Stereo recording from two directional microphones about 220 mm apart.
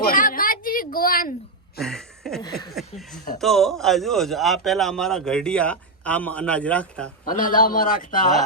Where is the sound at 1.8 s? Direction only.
Centre (ahead or behind).